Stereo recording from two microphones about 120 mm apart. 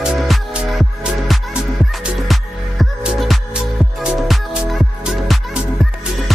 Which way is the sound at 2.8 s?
5° right (ahead or behind).